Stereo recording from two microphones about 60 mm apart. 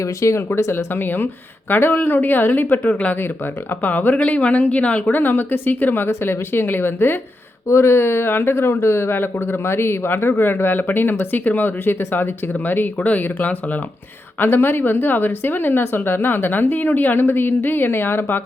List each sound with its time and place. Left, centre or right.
0.0 s speech: left
5.2 s speech: left
14.3 s speech: left